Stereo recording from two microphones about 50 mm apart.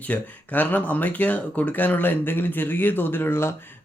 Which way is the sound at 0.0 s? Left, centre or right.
Left.